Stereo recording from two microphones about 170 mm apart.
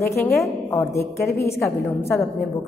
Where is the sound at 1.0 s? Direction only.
70° left (ahead or behind).